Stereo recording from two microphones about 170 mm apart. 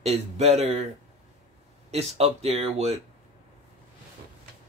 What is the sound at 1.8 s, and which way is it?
Speech, 40° right (ahead or behind).